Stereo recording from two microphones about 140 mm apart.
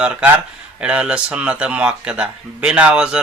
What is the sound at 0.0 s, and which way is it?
Speech, 10° right (ahead or behind).